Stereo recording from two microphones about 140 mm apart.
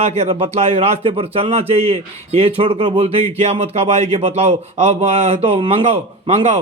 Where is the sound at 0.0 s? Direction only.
50° right (ahead or behind).